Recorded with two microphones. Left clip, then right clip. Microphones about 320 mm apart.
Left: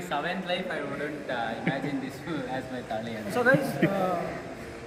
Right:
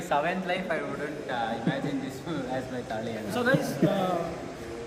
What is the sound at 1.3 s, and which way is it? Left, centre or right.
Speech, centre.